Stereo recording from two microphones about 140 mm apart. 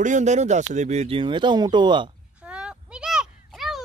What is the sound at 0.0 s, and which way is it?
Speech, 60° right (ahead or behind).